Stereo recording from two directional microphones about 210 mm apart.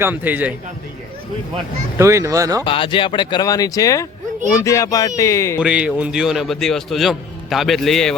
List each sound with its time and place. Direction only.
0.0 s speech: 10° right (ahead or behind)
2.0 s speech: 15° right (ahead or behind)
2.6 s speech: 25° left (ahead or behind)
5.5 s a man's voice: 5° right (ahead or behind)